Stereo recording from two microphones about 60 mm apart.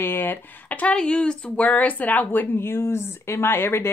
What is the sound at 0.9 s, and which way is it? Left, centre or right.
A woman's voice, centre.